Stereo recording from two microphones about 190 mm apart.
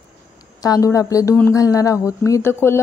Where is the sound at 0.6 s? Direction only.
20° left (ahead or behind).